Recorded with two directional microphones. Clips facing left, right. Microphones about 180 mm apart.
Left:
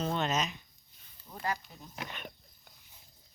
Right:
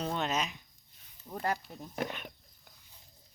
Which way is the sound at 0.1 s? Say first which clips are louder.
Left 1 dB; centre (ahead or behind).